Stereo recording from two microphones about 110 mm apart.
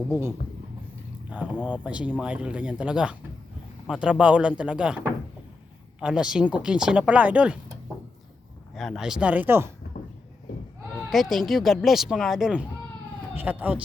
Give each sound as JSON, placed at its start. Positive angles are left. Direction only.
{"t": 0.1, "sound": "speech", "side_deg": -20}
{"t": 1.6, "sound": "speech", "side_deg": -15}
{"t": 6.0, "sound": "speech", "side_deg": -5}
{"t": 8.7, "sound": "speech", "side_deg": 0}
{"t": 11.1, "sound": "speech", "side_deg": 0}
{"t": 13.3, "sound": "speech", "side_deg": -15}